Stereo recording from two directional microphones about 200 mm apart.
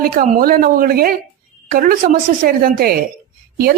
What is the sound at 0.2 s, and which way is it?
A woman's voice, 45° right (ahead or behind).